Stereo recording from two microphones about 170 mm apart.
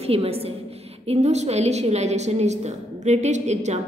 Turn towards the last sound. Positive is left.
turn(degrees=-40)  # may be behind; listen again after turning